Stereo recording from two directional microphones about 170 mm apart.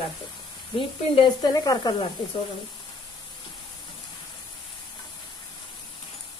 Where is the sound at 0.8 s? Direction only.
30° left (ahead or behind).